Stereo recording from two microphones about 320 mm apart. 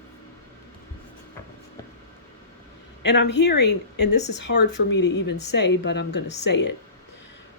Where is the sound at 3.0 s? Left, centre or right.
Left.